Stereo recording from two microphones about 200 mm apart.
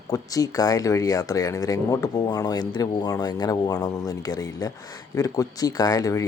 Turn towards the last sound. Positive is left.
turn(degrees=15)  # may be behind; listen again after turning